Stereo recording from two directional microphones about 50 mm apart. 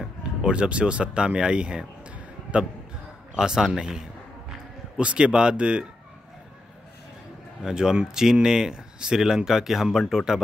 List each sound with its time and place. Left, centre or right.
0.2 s a man's voice: right
7.6 s speech: centre